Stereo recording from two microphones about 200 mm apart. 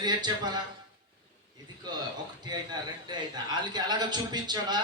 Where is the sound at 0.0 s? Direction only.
20° right (ahead or behind).